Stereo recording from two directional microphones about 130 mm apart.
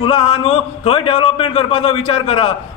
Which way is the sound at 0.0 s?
40° left (ahead or behind).